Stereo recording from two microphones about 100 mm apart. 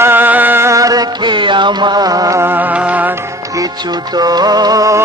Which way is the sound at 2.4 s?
20° right (ahead or behind).